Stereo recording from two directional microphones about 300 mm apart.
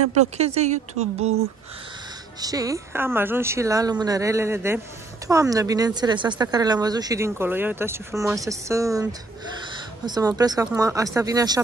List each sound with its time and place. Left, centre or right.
0.2 s speech: right
2.4 s speech: centre